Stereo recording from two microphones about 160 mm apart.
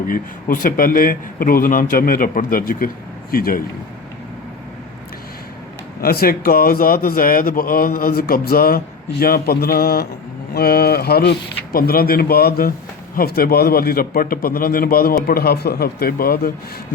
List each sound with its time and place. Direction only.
0.1 s a man's voice: 60° left (ahead or behind)
6.0 s a man's voice: 70° left (ahead or behind)